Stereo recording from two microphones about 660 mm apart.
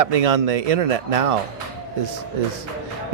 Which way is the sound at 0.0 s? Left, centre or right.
Right.